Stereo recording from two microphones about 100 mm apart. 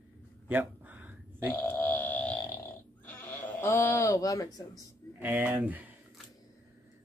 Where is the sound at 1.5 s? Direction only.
15° left (ahead or behind).